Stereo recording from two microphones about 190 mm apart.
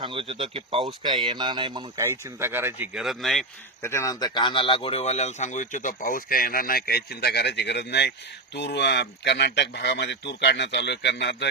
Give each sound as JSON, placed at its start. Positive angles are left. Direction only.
{"t": 0.0, "sound": "speech", "side_deg": -30}
{"t": 3.8, "sound": "speech", "side_deg": 15}